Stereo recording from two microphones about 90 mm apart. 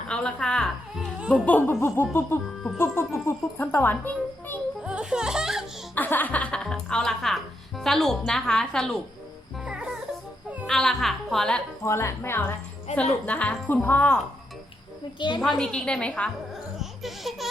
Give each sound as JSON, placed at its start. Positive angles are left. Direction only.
{"t": 0.1, "sound": "a woman's voice", "side_deg": 10}
{"t": 2.0, "sound": "a child's voice", "side_deg": 30}
{"t": 4.8, "sound": "music", "side_deg": -10}
{"t": 5.9, "sound": "a woman's voice", "side_deg": 20}
{"t": 9.6, "sound": "music", "side_deg": -10}
{"t": 10.7, "sound": "speech", "side_deg": 5}
{"t": 11.8, "sound": "speech", "side_deg": 30}
{"t": 13.0, "sound": "a woman's voice", "side_deg": 15}
{"t": 15.4, "sound": "a woman's voice", "side_deg": 5}
{"t": 17.0, "sound": "speech", "side_deg": 0}